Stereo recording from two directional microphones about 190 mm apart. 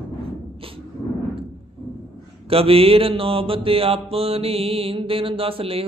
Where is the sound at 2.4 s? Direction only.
30° right (ahead or behind).